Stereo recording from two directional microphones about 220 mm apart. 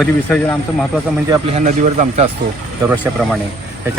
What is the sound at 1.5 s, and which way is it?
Speech, 35° right (ahead or behind).